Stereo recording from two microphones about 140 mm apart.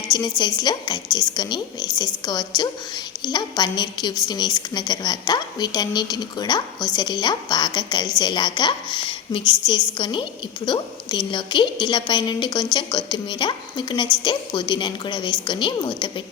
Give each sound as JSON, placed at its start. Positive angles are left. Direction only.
{"t": 0.1, "sound": "a woman's voice", "side_deg": 30}